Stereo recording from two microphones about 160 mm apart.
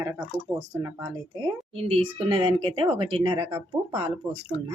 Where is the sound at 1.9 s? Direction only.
35° right (ahead or behind).